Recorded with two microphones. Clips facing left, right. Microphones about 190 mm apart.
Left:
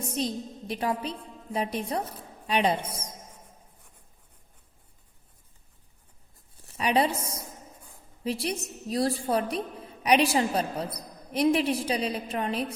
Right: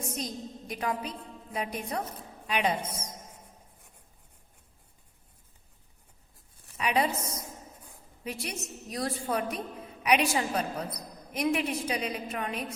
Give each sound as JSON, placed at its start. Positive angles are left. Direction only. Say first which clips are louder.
{"t": 0.2, "sound": "a woman's voice", "louder": "left 6 dB", "side_deg": 30}
{"t": 6.7, "sound": "a woman's voice", "louder": "left 3 dB", "side_deg": 35}
{"t": 8.2, "sound": "a woman's voice", "louder": "left 7 dB", "side_deg": 30}